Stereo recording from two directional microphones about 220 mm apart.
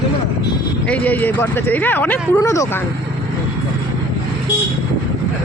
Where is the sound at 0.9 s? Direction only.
10° left (ahead or behind).